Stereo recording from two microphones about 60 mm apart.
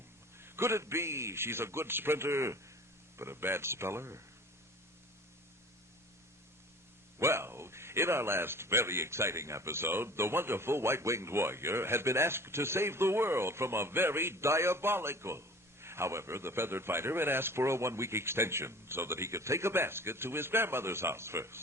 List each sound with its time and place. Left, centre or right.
0.3 s speech: right
7.2 s speech: right